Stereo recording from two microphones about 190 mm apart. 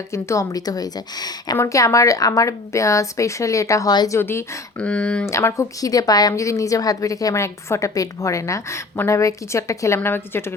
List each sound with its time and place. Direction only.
0.1 s a woman's voice: 15° left (ahead or behind)